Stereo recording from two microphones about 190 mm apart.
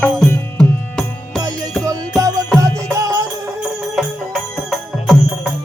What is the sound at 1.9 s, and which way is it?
Music, 20° right (ahead or behind).